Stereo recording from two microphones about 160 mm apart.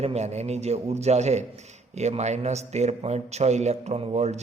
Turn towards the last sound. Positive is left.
turn(degrees=-45)  # may be behind; listen again after turning